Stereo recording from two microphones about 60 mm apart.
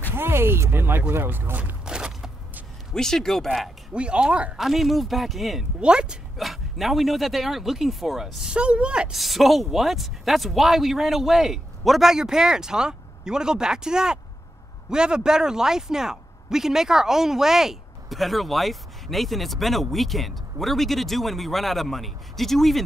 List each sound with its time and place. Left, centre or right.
0.1 s speech: right
1.9 s a sound: centre
2.9 s speech: centre
3.9 s speech: centre
4.6 s speech: centre
5.8 s speech: centre
6.3 s speech: centre
8.5 s speech: centre
9.1 s speech: centre